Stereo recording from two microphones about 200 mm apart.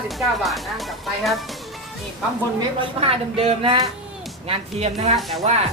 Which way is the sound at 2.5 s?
30° right (ahead or behind).